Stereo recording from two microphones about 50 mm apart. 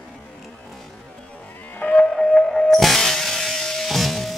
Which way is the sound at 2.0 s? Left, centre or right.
Centre.